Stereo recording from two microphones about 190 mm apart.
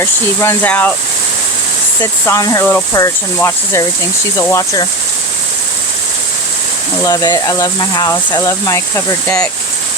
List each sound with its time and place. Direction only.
0.0 s speech: 15° left (ahead or behind)
2.2 s speech: 15° left (ahead or behind)
7.0 s speech: 20° left (ahead or behind)